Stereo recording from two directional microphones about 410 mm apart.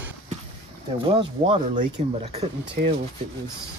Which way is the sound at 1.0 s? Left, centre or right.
Centre.